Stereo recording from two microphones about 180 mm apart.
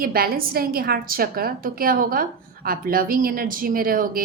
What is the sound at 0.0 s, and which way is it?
A woman's voice, 55° right (ahead or behind).